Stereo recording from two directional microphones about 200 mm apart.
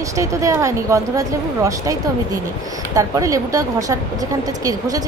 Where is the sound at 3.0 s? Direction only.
15° right (ahead or behind).